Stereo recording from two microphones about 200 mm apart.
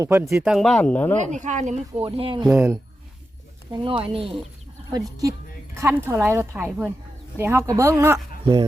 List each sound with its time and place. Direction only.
0.0 s speech: 15° right (ahead or behind)
0.5 s speech: centre (ahead or behind)
1.2 s speech: 35° right (ahead or behind)
2.0 s speech: 25° right (ahead or behind)
2.5 s speech: 10° right (ahead or behind)
3.7 s speech: 25° right (ahead or behind)